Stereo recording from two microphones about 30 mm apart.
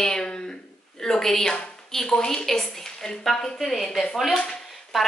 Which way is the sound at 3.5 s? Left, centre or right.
Centre.